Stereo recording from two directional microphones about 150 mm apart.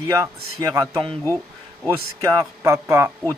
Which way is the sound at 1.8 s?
20° right (ahead or behind).